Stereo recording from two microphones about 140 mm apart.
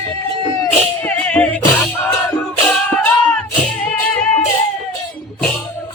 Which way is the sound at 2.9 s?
5° left (ahead or behind).